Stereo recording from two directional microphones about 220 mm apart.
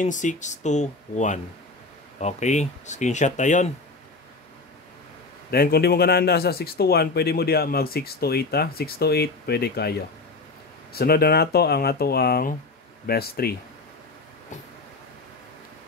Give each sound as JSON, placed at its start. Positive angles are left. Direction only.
{"t": 0.0, "sound": "speech", "side_deg": 35}
{"t": 5.5, "sound": "a man's voice", "side_deg": 45}